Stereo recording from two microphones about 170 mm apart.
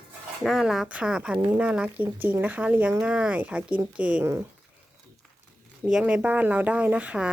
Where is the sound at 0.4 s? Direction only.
Centre (ahead or behind).